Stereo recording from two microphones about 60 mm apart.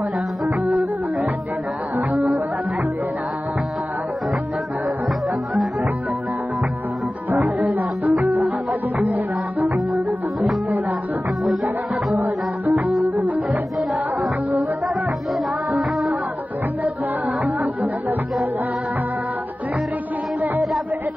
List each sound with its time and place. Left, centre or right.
7.4 s music: centre
7.7 s music: right
13.5 s music: centre
15.7 s music: centre